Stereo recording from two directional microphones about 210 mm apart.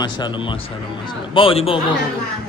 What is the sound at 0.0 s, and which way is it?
A man's voice, 20° left (ahead or behind).